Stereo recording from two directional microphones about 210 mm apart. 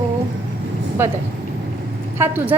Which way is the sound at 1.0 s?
10° right (ahead or behind).